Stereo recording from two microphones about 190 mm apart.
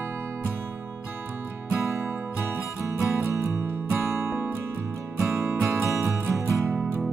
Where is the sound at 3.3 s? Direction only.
15° right (ahead or behind).